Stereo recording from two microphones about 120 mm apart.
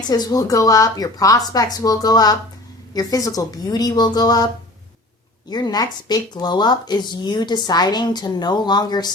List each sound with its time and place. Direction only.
0.1 s speech: 30° left (ahead or behind)
5.5 s speech: 35° left (ahead or behind)